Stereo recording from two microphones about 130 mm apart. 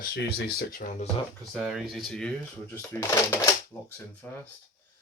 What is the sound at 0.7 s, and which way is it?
Speech, 90° left.